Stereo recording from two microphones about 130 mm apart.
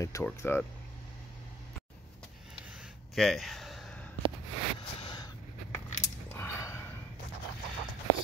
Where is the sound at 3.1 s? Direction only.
Centre (ahead or behind).